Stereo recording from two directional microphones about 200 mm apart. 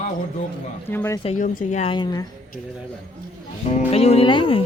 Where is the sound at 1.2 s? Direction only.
35° left (ahead or behind).